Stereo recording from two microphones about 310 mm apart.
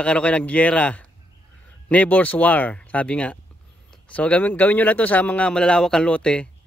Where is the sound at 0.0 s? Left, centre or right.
Centre.